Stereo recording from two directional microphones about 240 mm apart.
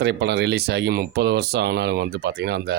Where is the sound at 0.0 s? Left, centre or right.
Right.